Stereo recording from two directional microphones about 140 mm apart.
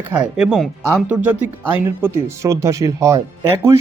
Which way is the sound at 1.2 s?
15° right (ahead or behind).